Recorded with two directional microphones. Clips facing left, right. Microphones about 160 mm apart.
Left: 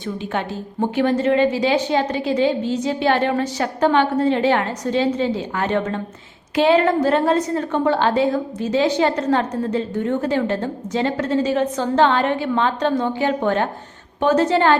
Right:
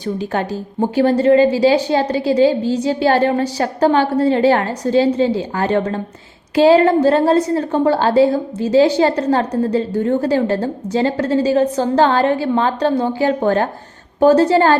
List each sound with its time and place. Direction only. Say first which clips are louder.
0.3 s a woman's voice: right 2 dB; 35° right (ahead or behind)